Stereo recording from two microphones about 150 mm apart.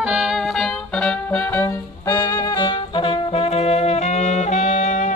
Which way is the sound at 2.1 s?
25° left (ahead or behind).